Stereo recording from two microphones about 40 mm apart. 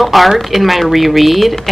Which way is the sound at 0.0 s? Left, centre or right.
Centre.